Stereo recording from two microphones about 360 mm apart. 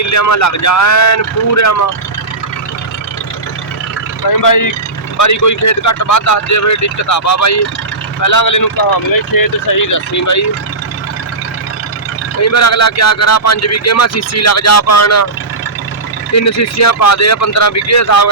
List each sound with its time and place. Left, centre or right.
0.0 s speech: left
4.4 s speech: left
9.7 s speech: left
12.4 s speech: left
16.3 s speech: left